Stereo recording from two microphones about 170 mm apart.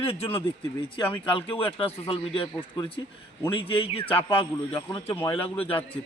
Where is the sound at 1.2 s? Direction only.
30° left (ahead or behind).